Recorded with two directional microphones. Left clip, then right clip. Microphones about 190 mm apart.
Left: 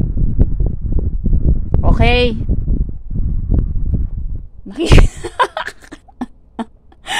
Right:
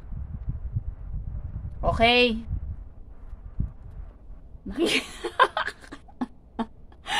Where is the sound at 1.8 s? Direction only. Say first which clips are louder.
Left 4 dB; 40° left (ahead or behind).